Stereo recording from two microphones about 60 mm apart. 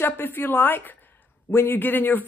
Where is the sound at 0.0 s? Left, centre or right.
Left.